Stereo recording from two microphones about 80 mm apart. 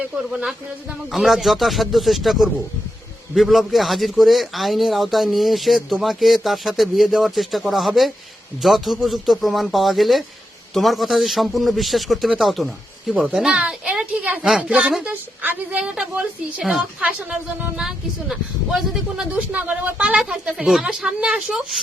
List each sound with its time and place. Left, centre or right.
0.2 s a man's voice: centre
14.4 s a woman's voice: centre
19.3 s a woman's voice: centre